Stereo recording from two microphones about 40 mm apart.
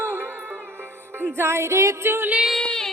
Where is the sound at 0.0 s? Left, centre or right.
Right.